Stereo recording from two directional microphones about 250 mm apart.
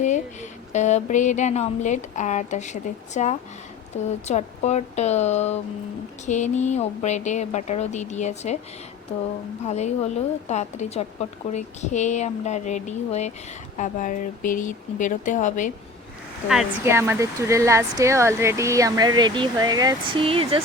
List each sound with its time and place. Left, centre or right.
0.7 s a woman's voice: left
9.6 s a woman's voice: left
16.5 s speech: centre; by 20.6 s right